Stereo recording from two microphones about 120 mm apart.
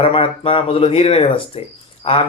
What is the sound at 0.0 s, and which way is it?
Speech, 50° left (ahead or behind).